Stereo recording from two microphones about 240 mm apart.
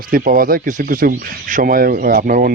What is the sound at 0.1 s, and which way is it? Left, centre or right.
Speech, right.